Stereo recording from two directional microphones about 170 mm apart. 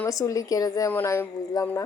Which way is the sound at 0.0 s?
20° left (ahead or behind).